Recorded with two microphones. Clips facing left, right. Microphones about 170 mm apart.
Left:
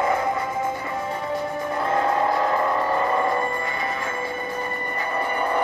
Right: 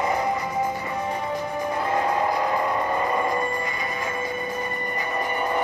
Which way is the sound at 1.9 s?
15° right (ahead or behind).